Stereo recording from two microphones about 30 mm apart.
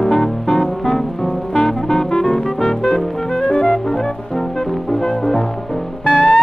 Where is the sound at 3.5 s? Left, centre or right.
Left.